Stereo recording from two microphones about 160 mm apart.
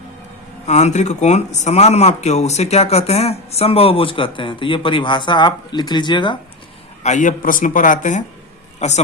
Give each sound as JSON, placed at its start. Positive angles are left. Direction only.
{"t": 0.7, "sound": "speech", "side_deg": 45}
{"t": 7.0, "sound": "a man's voice", "side_deg": 50}